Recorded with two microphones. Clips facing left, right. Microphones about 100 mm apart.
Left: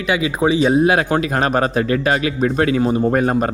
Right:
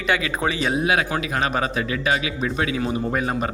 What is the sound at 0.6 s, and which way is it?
A man's voice, 35° left (ahead or behind).